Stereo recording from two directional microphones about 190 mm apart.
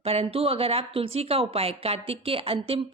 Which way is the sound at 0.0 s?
30° right (ahead or behind).